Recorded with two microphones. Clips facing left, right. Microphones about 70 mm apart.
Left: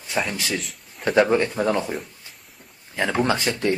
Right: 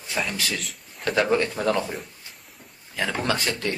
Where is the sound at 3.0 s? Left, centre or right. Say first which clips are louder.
Left 4 dB; left.